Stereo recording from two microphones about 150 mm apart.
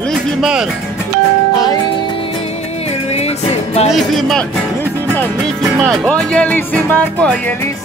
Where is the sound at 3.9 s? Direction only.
Centre (ahead or behind).